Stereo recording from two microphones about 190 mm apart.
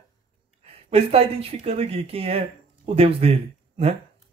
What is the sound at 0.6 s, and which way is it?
Speech, 30° right (ahead or behind).